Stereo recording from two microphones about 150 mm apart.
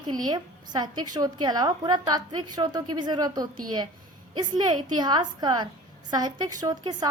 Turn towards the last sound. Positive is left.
turn(degrees=-25)  # may be behind; listen again after turning